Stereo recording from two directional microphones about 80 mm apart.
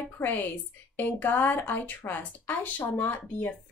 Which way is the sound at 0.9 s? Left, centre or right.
Left.